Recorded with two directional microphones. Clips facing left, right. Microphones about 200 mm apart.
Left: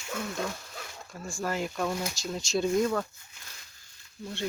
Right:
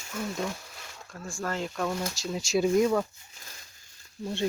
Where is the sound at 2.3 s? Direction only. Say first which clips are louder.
Right 3 dB; 5° right (ahead or behind).